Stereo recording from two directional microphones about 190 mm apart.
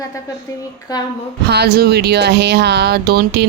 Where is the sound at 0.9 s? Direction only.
20° left (ahead or behind).